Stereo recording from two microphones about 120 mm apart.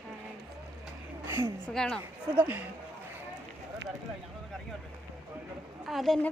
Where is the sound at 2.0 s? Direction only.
15° right (ahead or behind).